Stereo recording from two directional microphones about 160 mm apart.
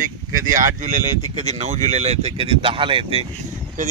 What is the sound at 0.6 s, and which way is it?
Speech, 50° right (ahead or behind).